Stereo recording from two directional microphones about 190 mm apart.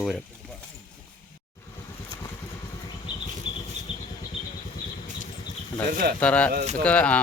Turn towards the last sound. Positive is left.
turn(degrees=5)  # may be behind; listen again after turning